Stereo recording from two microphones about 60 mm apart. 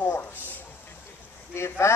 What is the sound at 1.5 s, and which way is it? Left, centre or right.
Speech, left.